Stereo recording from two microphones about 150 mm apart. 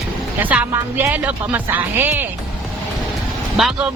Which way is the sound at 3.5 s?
Centre (ahead or behind).